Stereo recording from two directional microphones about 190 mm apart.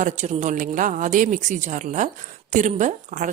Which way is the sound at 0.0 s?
40° right (ahead or behind).